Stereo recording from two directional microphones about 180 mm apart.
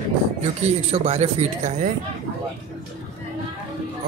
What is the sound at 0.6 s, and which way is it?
Speech, 40° right (ahead or behind).